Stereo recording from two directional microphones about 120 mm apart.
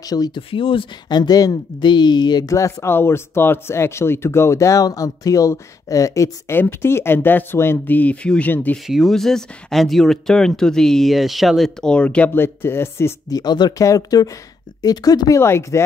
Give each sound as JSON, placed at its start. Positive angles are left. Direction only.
{"t": 0.1, "sound": "speech", "side_deg": 35}
{"t": 0.5, "sound": "speech", "side_deg": 45}
{"t": 8.8, "sound": "speech", "side_deg": 0}